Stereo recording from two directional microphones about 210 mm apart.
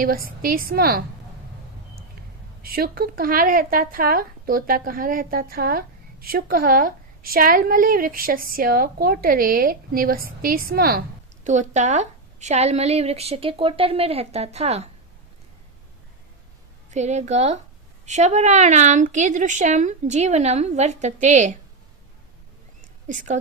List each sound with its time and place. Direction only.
0.0 s speech: 45° right (ahead or behind)
2.6 s speech: 45° right (ahead or behind)
11.4 s a woman's voice: 35° right (ahead or behind)
16.9 s a woman's voice: 35° right (ahead or behind)
23.0 s a woman's voice: 35° right (ahead or behind)